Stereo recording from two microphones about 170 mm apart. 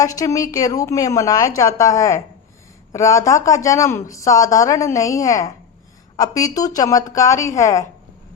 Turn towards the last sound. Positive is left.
turn(degrees=20)  # may be behind; listen again after turning